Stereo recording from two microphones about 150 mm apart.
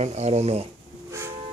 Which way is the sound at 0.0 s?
45° right (ahead or behind).